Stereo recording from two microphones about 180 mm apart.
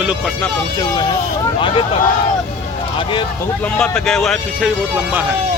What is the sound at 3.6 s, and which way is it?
Speech, 5° left (ahead or behind).